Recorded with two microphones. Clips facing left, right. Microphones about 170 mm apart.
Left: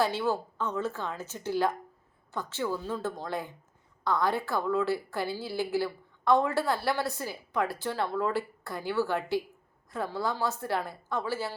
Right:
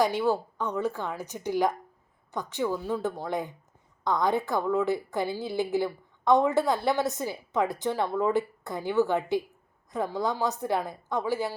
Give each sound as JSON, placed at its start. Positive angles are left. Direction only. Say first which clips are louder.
{"t": 0.0, "sound": "a woman's voice", "louder": "right 3 dB", "side_deg": -15}